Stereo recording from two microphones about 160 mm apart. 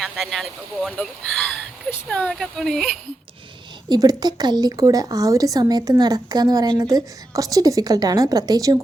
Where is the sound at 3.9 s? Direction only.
25° right (ahead or behind).